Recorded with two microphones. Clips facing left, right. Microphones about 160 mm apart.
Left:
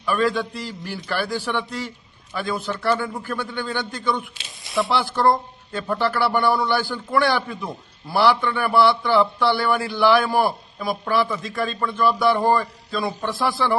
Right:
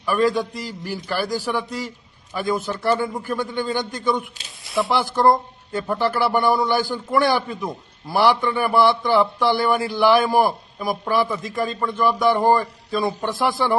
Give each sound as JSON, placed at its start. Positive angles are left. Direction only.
{"t": 0.0, "sound": "a man's voice", "side_deg": -10}
{"t": 0.6, "sound": "a man's voice", "side_deg": -40}
{"t": 1.0, "sound": "a man's voice", "side_deg": -10}
{"t": 1.3, "sound": "a man's voice", "side_deg": -40}
{"t": 1.5, "sound": "a man's voice", "side_deg": -10}
{"t": 4.6, "sound": "speech", "side_deg": 0}
{"t": 5.1, "sound": "a man's voice", "side_deg": -15}